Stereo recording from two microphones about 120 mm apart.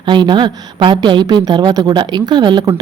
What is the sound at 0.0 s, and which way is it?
A woman's voice, 40° right (ahead or behind).